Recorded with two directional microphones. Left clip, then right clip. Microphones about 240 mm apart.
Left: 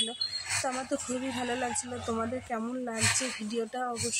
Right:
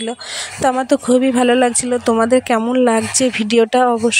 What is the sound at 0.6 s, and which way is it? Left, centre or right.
Speech, right.